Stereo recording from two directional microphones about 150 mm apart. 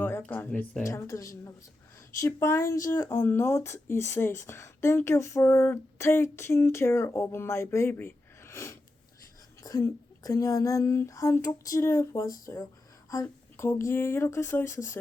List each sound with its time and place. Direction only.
0.0 s speech: 10° left (ahead or behind)